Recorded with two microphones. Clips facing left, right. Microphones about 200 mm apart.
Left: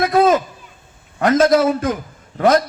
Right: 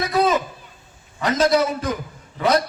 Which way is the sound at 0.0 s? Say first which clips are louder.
Left 5 dB; 50° left (ahead or behind).